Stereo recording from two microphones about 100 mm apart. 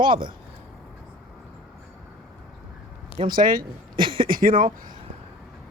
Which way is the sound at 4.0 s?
55° right (ahead or behind).